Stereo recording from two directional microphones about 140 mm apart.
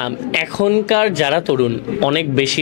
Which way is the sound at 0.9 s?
15° left (ahead or behind).